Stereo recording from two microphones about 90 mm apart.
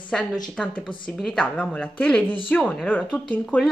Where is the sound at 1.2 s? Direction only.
10° left (ahead or behind).